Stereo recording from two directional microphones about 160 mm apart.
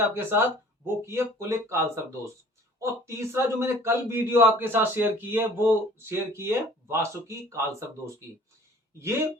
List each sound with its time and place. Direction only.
0.1 s speech: 15° right (ahead or behind)
2.8 s speech: 15° right (ahead or behind)